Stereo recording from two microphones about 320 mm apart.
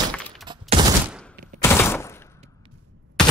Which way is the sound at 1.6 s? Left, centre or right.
Centre.